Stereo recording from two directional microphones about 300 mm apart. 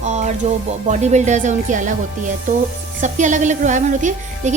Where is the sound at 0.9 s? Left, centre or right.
Right.